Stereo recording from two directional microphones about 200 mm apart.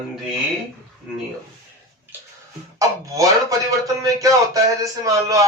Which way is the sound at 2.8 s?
15° right (ahead or behind).